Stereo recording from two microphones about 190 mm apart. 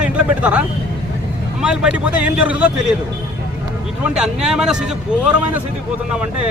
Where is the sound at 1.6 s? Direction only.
5° right (ahead or behind).